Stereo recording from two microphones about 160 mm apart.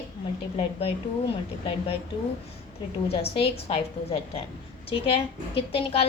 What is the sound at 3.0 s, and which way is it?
A woman's voice, 40° left (ahead or behind).